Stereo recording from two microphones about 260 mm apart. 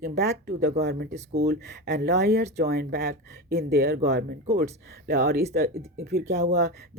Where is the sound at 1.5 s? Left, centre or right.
Right.